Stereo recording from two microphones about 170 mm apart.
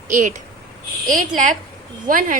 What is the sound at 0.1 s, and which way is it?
Speech, 50° right (ahead or behind).